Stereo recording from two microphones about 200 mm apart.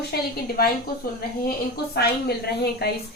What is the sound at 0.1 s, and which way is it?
Speech, 50° left (ahead or behind).